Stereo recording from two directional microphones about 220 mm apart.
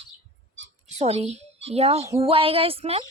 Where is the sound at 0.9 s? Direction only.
30° right (ahead or behind).